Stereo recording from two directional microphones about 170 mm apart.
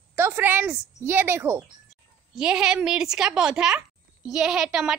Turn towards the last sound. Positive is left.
turn(degrees=-5)  # may be behind; listen again after turning